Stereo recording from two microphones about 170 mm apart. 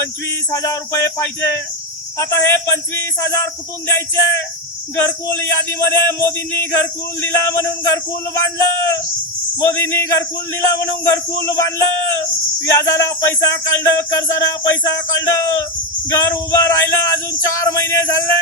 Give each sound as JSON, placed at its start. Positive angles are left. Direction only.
{"t": 0.5, "sound": "speech", "side_deg": 20}
{"t": 5.9, "sound": "speech", "side_deg": 15}